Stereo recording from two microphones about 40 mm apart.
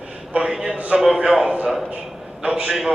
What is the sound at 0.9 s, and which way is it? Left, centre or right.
A man's voice, centre.